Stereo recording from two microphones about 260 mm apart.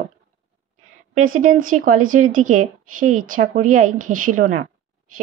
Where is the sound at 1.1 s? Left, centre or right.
Right.